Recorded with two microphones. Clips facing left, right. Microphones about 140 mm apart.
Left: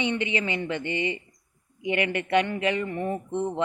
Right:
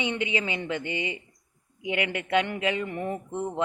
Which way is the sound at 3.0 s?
20° left (ahead or behind).